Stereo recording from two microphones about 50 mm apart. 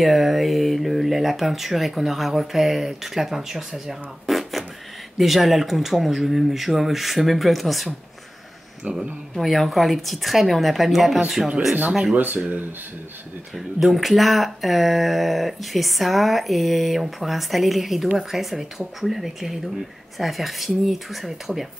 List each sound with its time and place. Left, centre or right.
0.0 s speech: centre
8.8 s speech: right
9.4 s speech: centre
13.6 s speech: centre